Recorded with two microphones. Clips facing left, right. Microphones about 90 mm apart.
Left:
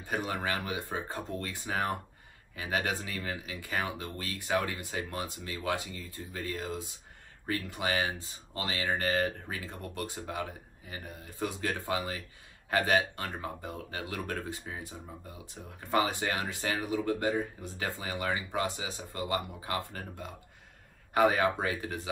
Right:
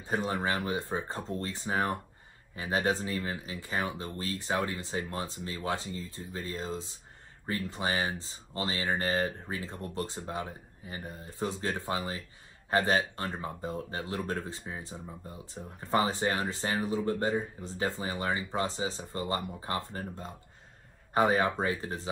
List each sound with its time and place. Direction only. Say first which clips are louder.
0.0 s speech: right 2 dB; 30° right (ahead or behind)